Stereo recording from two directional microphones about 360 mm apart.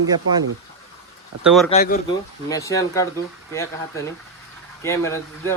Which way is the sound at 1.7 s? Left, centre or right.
Left.